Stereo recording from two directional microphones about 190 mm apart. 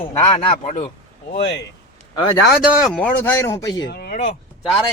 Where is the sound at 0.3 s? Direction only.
35° left (ahead or behind).